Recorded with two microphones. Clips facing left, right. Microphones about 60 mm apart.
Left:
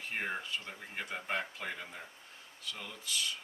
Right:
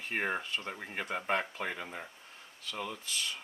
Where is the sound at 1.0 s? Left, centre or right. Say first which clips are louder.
Right 4 dB; right.